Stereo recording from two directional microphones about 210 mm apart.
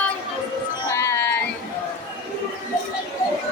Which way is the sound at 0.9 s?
15° left (ahead or behind).